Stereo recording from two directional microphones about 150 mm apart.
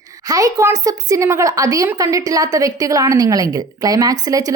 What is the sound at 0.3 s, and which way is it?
A woman's voice, 25° right (ahead or behind).